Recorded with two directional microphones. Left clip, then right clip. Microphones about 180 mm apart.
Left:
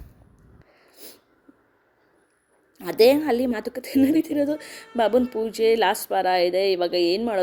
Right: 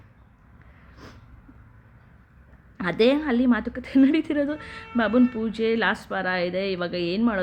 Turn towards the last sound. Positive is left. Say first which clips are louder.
# left 4 dB
turn(degrees=15)  # may be behind; listen again after turning